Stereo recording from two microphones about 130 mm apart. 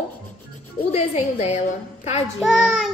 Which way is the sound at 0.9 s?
55° left (ahead or behind).